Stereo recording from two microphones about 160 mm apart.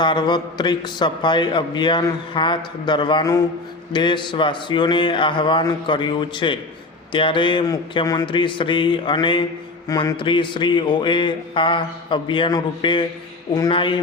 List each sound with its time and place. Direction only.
0.0 s a man's voice: 30° left (ahead or behind)